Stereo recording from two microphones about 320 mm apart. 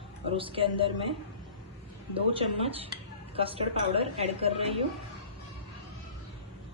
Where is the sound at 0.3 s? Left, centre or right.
Centre.